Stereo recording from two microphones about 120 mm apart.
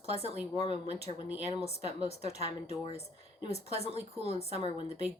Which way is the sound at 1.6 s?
60° left (ahead or behind).